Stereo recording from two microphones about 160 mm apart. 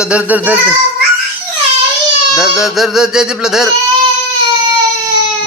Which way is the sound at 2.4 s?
5° right (ahead or behind).